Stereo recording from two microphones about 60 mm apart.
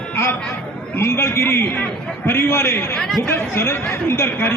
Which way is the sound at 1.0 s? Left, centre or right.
Left.